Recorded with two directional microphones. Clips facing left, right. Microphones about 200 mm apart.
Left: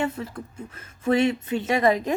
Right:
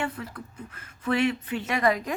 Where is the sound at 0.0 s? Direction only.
25° left (ahead or behind).